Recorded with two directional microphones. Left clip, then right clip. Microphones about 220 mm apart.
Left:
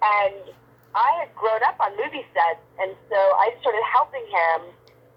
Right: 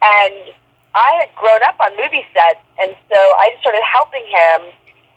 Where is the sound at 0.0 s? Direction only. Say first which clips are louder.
Right 10 dB; 25° right (ahead or behind).